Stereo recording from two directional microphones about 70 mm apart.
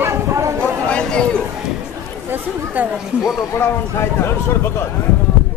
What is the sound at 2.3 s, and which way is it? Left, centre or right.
Speech, right.